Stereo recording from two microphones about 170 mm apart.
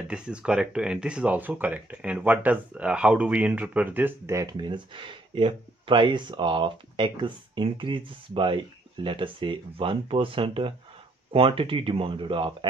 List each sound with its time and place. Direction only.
0.1 s speech: 5° right (ahead or behind); by 12.5 s 30° right (ahead or behind)